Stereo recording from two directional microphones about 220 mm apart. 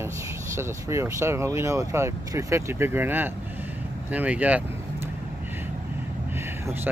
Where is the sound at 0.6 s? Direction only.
10° right (ahead or behind).